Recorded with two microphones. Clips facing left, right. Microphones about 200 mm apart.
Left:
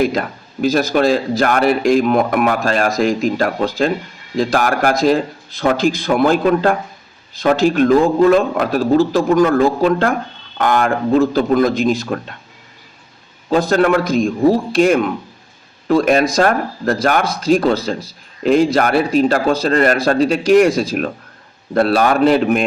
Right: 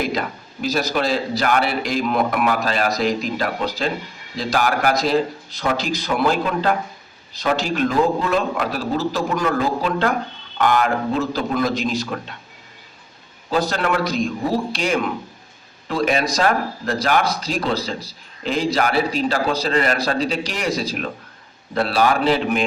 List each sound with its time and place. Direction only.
0.1 s a man's voice: 50° left (ahead or behind)
13.5 s a man's voice: 50° left (ahead or behind)